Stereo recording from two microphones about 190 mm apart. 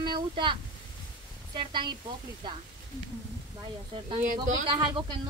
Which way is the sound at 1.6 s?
25° right (ahead or behind).